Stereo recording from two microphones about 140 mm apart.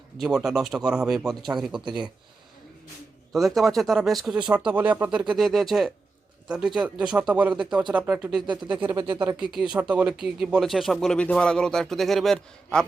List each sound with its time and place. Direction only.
0.2 s speech: 5° right (ahead or behind)
1.4 s speech: 30° right (ahead or behind)
3.3 s speech: centre (ahead or behind)
8.6 s speech: 35° right (ahead or behind)
9.4 s speech: 5° right (ahead or behind)